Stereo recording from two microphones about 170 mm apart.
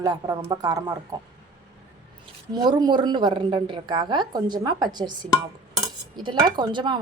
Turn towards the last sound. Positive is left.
turn(degrees=-25)  # may be behind; listen again after turning